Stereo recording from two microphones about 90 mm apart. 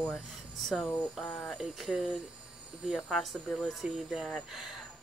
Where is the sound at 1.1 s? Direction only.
Centre (ahead or behind).